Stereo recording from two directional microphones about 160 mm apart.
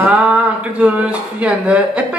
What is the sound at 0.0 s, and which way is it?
Speech, 10° right (ahead or behind).